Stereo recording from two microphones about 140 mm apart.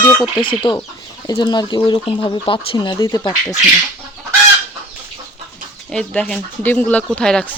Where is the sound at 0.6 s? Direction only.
35° left (ahead or behind).